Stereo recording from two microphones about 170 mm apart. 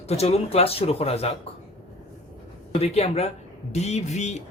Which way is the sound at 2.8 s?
40° left (ahead or behind).